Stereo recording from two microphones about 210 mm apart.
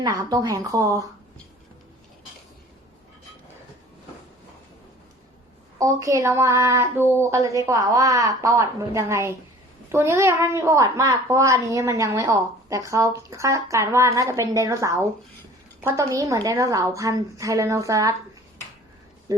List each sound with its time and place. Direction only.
0.0 s a child's voice: 15° right (ahead or behind)
5.8 s a child's voice: 15° right (ahead or behind)